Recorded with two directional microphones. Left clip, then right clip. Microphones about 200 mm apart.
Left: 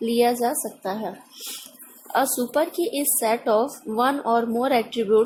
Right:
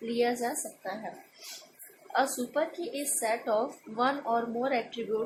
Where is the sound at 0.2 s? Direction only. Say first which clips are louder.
Left 8 dB; 50° left (ahead or behind).